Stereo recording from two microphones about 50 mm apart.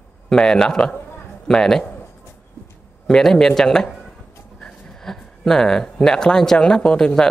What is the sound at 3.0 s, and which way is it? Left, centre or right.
A man's voice, centre.